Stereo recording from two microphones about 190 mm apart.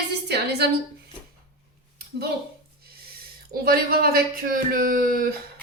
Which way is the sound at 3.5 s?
50° right (ahead or behind).